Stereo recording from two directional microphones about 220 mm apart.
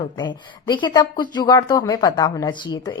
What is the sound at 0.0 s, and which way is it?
Speech, 20° left (ahead or behind).